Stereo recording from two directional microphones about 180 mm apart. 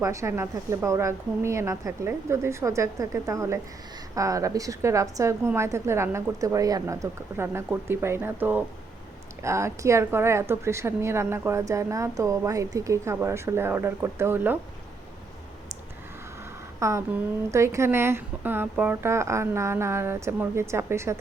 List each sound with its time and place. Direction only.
0.0 s a woman's voice: 15° right (ahead or behind)
16.8 s a woman's voice: 15° right (ahead or behind)